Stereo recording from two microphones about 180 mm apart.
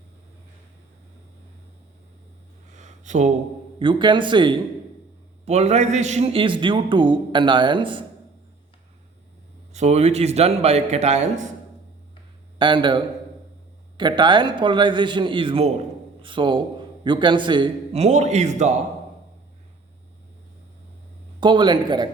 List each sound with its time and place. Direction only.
2.7 s a sound: 40° right (ahead or behind)
3.8 s a man's voice: 25° right (ahead or behind)
5.5 s a man's voice: 40° right (ahead or behind)
9.7 s a man's voice: 35° right (ahead or behind)
12.5 s a man's voice: 25° right (ahead or behind)
18.0 s a man's voice: 40° right (ahead or behind)
21.4 s a man's voice: 25° right (ahead or behind)